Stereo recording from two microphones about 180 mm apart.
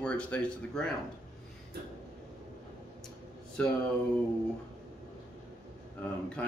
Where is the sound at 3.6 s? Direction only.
5° left (ahead or behind).